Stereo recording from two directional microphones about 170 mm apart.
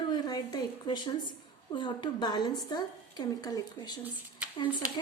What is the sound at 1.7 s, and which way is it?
Speech, 30° left (ahead or behind).